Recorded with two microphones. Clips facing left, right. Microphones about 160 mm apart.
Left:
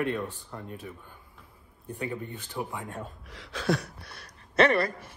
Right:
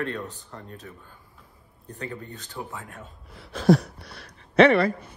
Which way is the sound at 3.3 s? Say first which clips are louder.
Right 9 dB; 75° left (ahead or behind).